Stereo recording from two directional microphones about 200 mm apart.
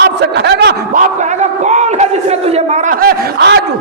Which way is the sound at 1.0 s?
35° right (ahead or behind).